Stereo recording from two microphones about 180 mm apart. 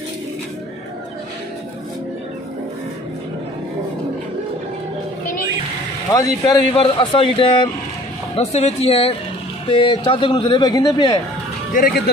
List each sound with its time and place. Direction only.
6.1 s speech: 20° left (ahead or behind)
6.7 s speech: 30° left (ahead or behind)
11.7 s speech: 55° left (ahead or behind)